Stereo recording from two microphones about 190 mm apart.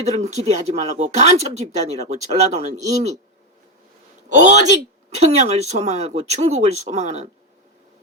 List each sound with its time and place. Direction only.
0.0 s speech: 35° right (ahead or behind)
4.3 s speech: 40° right (ahead or behind)